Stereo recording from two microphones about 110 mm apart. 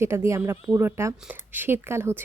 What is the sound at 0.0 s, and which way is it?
Speech, 25° right (ahead or behind).